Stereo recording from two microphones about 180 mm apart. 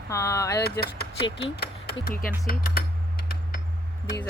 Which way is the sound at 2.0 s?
50° left (ahead or behind).